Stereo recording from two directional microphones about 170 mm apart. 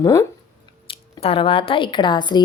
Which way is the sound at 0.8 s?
35° left (ahead or behind).